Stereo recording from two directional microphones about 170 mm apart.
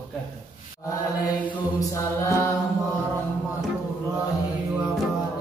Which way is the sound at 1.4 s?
15° left (ahead or behind).